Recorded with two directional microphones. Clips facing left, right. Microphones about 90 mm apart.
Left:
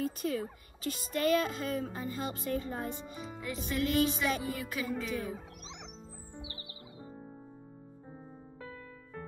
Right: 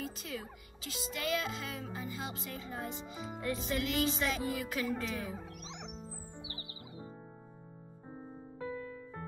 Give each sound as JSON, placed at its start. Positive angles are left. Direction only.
{"t": 0.0, "sound": "music", "side_deg": 50}
{"t": 3.3, "sound": "music", "side_deg": 0}
{"t": 4.4, "sound": "speech", "side_deg": 5}
{"t": 8.5, "sound": "music", "side_deg": -25}